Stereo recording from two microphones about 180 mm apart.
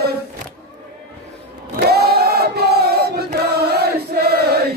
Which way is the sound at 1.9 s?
60° right (ahead or behind).